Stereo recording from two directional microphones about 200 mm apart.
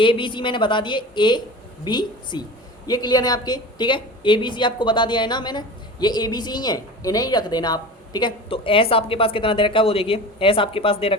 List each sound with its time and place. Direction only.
0.0 s a woman's voice: 25° left (ahead or behind)